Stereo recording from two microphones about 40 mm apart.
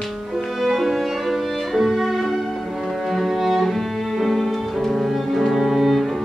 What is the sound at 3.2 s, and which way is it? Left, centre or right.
Music, centre.